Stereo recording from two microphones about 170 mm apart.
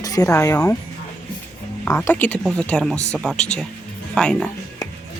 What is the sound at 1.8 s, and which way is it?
Speech, 15° left (ahead or behind).